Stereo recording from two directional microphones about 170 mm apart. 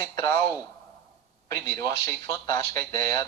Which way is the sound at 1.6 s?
15° left (ahead or behind).